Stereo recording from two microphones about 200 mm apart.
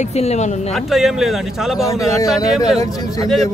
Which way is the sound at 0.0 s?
35° left (ahead or behind).